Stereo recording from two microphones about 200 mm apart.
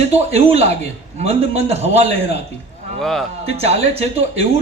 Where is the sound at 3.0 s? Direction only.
Centre (ahead or behind).